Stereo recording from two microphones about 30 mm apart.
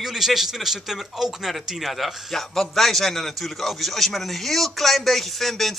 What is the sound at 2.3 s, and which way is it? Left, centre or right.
A man's voice, centre.